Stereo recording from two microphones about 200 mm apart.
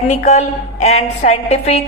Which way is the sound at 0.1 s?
35° left (ahead or behind).